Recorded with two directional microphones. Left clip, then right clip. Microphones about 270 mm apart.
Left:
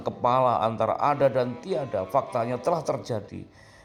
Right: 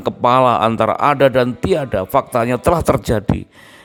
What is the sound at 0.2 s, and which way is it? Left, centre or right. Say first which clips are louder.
A man's voice: right 9 dB; right.